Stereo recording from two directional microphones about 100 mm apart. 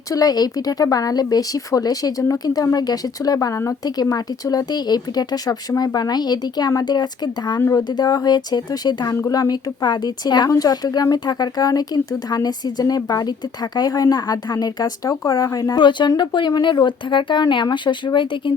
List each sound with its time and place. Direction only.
0.1 s a woman's voice: 40° left (ahead or behind)
7.6 s speech: 30° left (ahead or behind)
7.9 s a woman's voice: 40° left (ahead or behind)
15.7 s speech: 50° left (ahead or behind)